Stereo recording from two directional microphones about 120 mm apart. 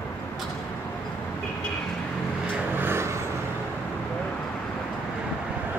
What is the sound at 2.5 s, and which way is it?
Vehicle, 20° right (ahead or behind).